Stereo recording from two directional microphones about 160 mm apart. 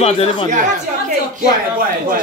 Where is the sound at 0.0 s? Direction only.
40° left (ahead or behind).